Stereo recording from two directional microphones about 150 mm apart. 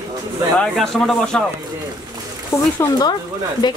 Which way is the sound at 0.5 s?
Centre (ahead or behind).